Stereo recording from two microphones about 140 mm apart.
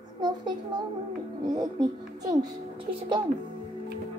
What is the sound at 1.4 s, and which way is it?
Music, 30° right (ahead or behind).